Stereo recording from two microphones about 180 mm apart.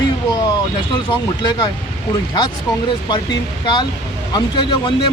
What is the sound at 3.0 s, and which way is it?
Speech, 25° left (ahead or behind).